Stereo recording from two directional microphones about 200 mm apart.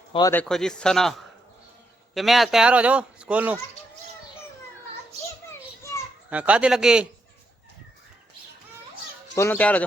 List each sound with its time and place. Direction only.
0.1 s speech: 20° left (ahead or behind)
0.3 s a man's voice: 5° left (ahead or behind)
5.5 s children playing: 15° left (ahead or behind)
6.3 s a man's voice: 5° right (ahead or behind)
9.3 s speech: 15° left (ahead or behind)